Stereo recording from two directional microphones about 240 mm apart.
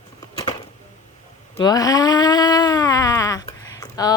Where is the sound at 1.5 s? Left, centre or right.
Centre.